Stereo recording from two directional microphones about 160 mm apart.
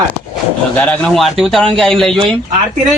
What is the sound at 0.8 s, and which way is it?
A man's voice, 5° left (ahead or behind).